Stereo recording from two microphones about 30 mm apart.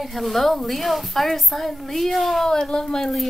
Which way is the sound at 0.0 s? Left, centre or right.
Centre.